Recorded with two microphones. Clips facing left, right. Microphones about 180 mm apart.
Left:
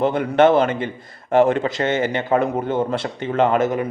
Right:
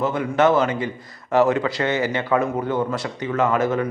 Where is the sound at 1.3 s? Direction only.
50° left (ahead or behind).